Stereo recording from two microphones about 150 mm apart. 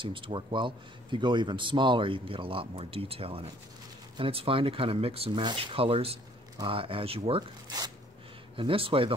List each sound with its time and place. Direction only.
0.0 s a man's voice: 35° right (ahead or behind)
8.5 s a man's voice: 35° right (ahead or behind)